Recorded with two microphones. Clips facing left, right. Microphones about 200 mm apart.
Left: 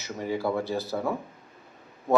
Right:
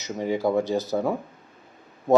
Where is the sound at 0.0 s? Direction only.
20° right (ahead or behind).